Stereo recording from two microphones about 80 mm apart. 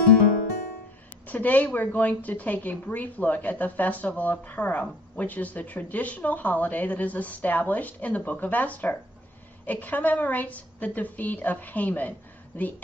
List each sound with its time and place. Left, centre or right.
1.2 s speech: left